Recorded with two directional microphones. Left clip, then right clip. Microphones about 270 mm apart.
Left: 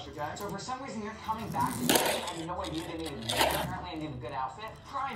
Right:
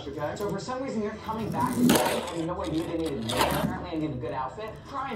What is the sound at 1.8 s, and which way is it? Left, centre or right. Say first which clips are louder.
Speech: right 4 dB; centre.